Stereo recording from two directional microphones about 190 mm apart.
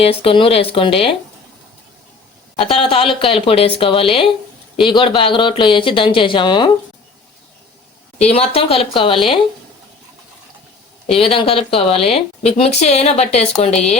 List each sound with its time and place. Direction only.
0.0 s speech: 30° left (ahead or behind)
2.6 s speech: 30° left (ahead or behind)
8.3 s speech: 30° left (ahead or behind)
11.1 s speech: 30° left (ahead or behind)